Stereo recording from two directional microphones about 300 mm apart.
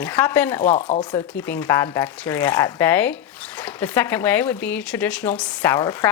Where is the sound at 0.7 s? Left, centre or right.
Left.